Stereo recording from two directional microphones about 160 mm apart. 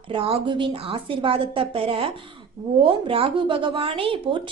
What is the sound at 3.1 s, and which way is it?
A woman's voice, 35° right (ahead or behind).